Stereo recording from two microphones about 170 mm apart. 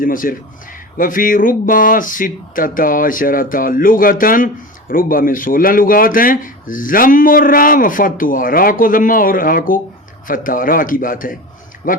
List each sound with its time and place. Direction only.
0.0 s a man's voice: 55° left (ahead or behind)